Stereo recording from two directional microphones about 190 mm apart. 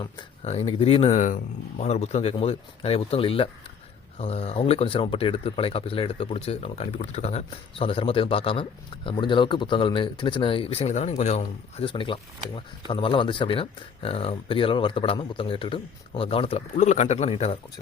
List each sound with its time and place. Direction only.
0.0 s speech: 30° left (ahead or behind)